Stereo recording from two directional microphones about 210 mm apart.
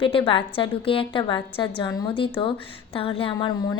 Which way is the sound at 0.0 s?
25° left (ahead or behind).